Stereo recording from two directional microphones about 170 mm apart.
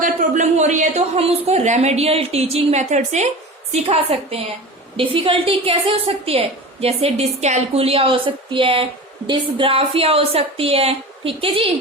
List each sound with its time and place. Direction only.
0.0 s a woman's voice: 50° right (ahead or behind); by 11.7 s 30° right (ahead or behind)